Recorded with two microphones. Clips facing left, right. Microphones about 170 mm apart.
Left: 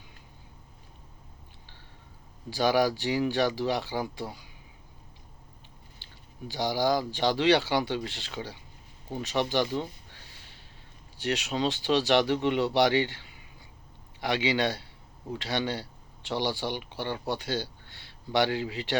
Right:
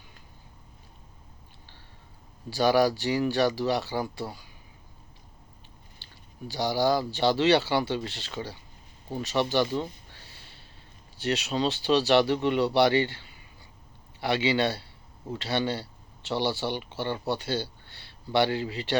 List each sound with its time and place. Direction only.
2.5 s speech: 15° left (ahead or behind)
6.5 s speech: 15° left (ahead or behind)
11.2 s speech: 15° left (ahead or behind)
14.2 s speech: 15° left (ahead or behind)